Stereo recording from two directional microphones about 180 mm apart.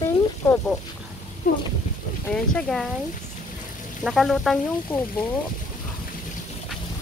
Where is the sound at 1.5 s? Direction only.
50° left (ahead or behind).